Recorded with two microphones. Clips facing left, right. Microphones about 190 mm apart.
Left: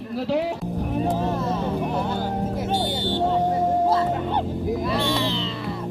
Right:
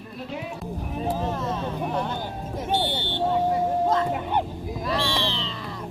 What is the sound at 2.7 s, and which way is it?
Vehicle, 40° left (ahead or behind).